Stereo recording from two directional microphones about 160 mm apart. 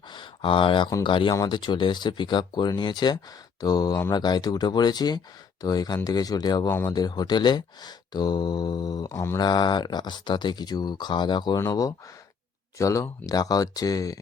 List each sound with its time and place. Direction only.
0.1 s speech: 30° left (ahead or behind); by 6.9 s 15° left (ahead or behind)
6.9 s speech: 25° left (ahead or behind)
9.4 s speech: 30° left (ahead or behind)